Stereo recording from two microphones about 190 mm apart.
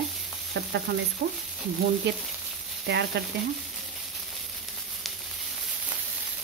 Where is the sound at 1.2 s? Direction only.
45° right (ahead or behind).